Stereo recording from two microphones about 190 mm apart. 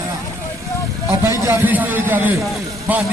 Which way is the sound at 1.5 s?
10° right (ahead or behind).